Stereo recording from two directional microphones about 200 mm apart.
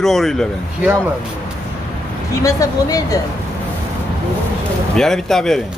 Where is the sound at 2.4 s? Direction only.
15° left (ahead or behind).